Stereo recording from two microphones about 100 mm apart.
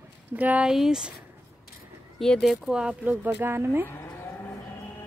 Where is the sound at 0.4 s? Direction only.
15° right (ahead or behind).